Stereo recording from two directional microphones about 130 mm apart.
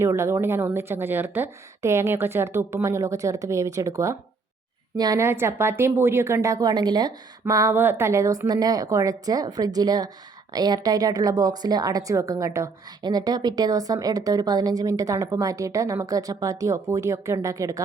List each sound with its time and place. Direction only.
0.0 s a woman's voice: 20° right (ahead or behind)
5.2 s a woman's voice: 20° right (ahead or behind)